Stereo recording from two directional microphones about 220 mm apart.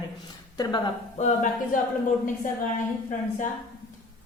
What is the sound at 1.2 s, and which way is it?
A capella, 35° left (ahead or behind).